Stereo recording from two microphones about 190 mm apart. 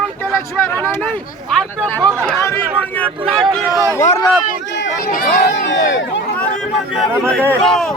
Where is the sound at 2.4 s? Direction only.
10° left (ahead or behind).